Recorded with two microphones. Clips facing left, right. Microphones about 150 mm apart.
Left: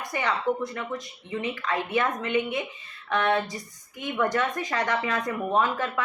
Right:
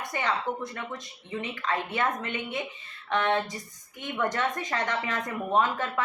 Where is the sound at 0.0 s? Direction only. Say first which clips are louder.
Left 2 dB; 20° right (ahead or behind).